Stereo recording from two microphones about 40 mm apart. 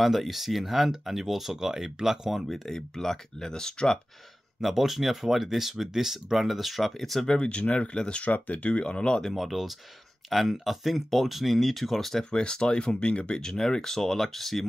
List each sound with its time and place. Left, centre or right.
0.0 s speech: centre
2.6 s speech: centre
4.6 s speech: centre
7.3 s speech: left
8.2 s speech: left
8.7 s speech: left
9.3 s speech: centre
12.3 s speech: left; by 14.7 s centre